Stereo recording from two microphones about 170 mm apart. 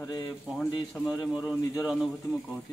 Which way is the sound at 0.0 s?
20° left (ahead or behind).